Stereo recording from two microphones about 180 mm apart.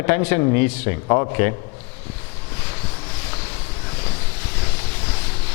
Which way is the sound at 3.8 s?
15° left (ahead or behind).